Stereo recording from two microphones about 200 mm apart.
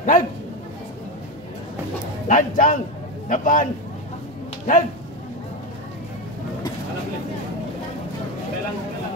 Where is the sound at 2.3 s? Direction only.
40° left (ahead or behind).